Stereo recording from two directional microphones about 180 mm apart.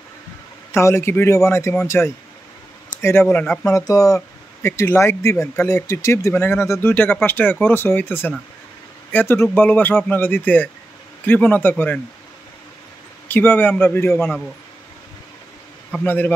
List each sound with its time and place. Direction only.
0.7 s speech: 15° left (ahead or behind)
13.3 s speech: 10° left (ahead or behind)
16.0 s speech: 10° left (ahead or behind)